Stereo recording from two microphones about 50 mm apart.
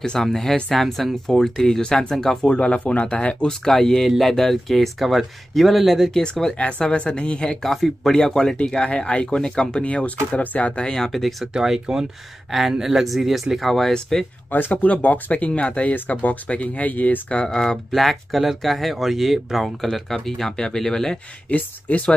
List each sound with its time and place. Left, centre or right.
0.0 s speech: centre
3.6 s speech: centre
6.6 s speech: left
7.6 s speech: centre; by 10.9 s left
10.9 s speech: centre
11.5 s speech: centre
14.5 s speech: left
17.5 s speech: centre
21.5 s speech: left